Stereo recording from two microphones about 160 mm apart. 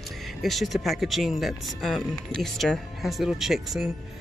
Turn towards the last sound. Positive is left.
turn(degrees=0)  # may be behind; listen again after turning